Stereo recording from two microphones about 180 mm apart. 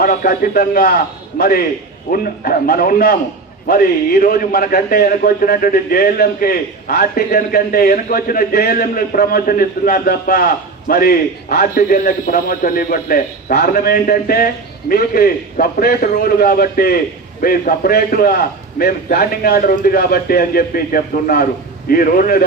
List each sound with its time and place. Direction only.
0.0 s a man's voice: 55° left (ahead or behind)